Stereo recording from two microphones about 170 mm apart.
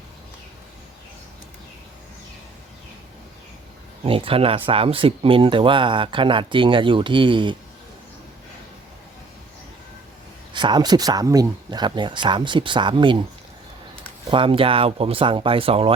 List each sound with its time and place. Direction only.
4.0 s speech: 35° right (ahead or behind)
10.5 s speech: 25° right (ahead or behind)
14.3 s speech: 30° right (ahead or behind)